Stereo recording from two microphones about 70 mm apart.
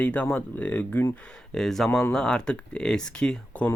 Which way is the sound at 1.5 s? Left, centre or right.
Centre.